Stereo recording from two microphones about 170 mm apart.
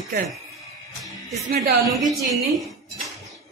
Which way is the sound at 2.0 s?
Centre (ahead or behind).